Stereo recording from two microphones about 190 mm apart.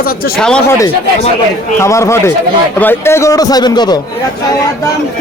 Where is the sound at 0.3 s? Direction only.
5° left (ahead or behind).